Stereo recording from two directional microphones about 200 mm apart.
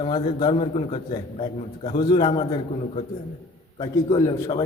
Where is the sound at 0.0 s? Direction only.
25° left (ahead or behind).